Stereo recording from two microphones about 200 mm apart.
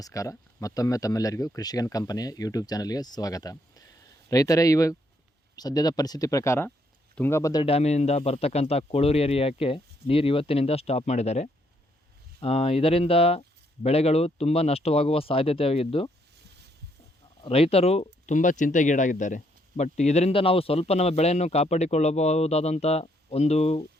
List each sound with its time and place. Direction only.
0.0 s speech: 15° left (ahead or behind)
7.6 s speech: 30° left (ahead or behind)
16.5 s a sound: 55° right (ahead or behind)
17.4 s speech: 30° left (ahead or behind)